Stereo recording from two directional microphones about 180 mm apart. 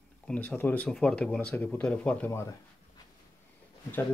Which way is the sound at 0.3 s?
10° left (ahead or behind).